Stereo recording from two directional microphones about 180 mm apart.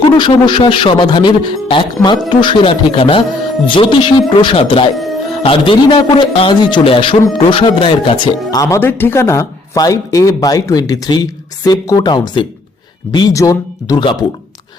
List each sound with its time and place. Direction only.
0.0 s speech: 25° left (ahead or behind)